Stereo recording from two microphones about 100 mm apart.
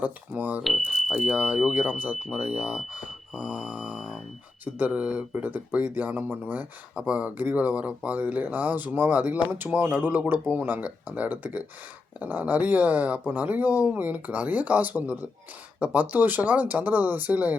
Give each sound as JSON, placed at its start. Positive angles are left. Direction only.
{"t": 0.0, "sound": "speech", "side_deg": -15}
{"t": 0.6, "sound": "speech", "side_deg": 0}